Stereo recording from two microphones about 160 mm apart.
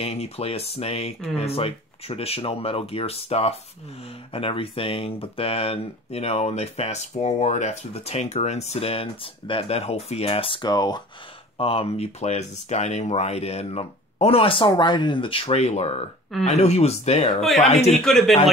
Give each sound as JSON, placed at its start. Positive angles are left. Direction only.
{"t": 0.0, "sound": "speech", "side_deg": 40}
{"t": 11.5, "sound": "speech", "side_deg": 35}
{"t": 17.4, "sound": "speech", "side_deg": 0}
{"t": 17.6, "sound": "speech", "side_deg": 40}
{"t": 18.0, "sound": "speech", "side_deg": 0}